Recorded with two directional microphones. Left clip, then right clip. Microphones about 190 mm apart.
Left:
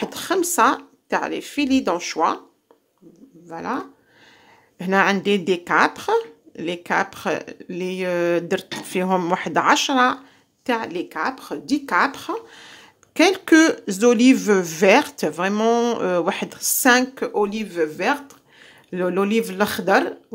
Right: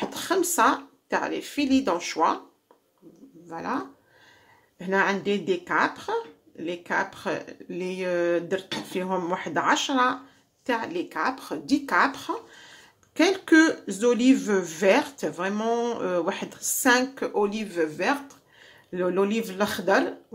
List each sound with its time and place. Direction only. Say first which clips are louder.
0.0 s a woman's voice: left 3 dB; 35° left (ahead or behind)
3.4 s speech: left 3 dB; 30° left (ahead or behind)